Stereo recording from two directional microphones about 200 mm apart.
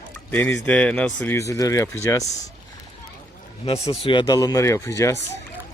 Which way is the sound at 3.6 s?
30° left (ahead or behind).